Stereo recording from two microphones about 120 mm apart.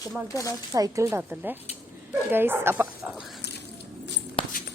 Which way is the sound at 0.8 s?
30° right (ahead or behind).